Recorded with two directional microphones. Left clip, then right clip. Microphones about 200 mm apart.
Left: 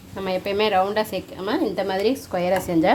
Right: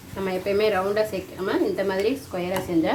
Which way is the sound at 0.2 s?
65° left (ahead or behind).